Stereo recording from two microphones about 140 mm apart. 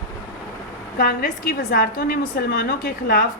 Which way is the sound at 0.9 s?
90° left.